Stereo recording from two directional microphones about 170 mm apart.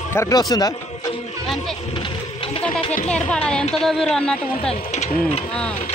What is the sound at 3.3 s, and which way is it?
Speech, 5° left (ahead or behind).